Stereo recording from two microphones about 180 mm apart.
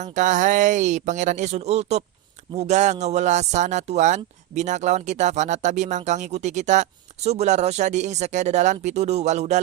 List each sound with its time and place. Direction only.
0.0 s speech: 45° right (ahead or behind)